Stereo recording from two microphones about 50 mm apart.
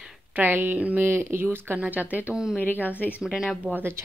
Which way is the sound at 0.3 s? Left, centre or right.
Right.